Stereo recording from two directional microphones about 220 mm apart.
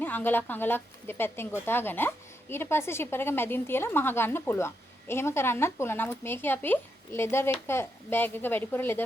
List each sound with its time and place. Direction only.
0.0 s speech: 10° left (ahead or behind)